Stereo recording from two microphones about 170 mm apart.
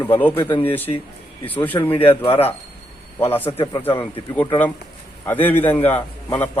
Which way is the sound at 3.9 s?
30° left (ahead or behind).